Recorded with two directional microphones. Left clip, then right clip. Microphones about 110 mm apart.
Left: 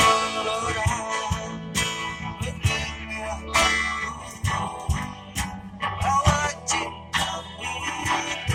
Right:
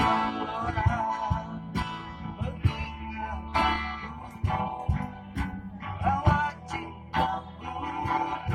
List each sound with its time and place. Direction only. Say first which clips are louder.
0.0 s music: left 6 dB; 30° left (ahead or behind)
6.1 s music: left 3 dB; 30° left (ahead or behind)